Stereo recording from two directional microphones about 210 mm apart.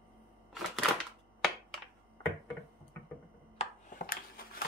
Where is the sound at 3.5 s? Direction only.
40° left (ahead or behind).